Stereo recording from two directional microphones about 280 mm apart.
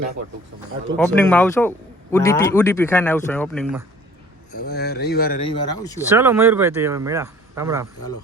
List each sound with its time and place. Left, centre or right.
0.9 s speech: centre
4.5 s speech: left
5.5 s speech: centre
6.1 s speech: centre